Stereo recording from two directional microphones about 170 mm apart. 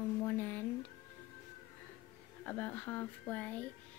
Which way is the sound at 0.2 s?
15° left (ahead or behind).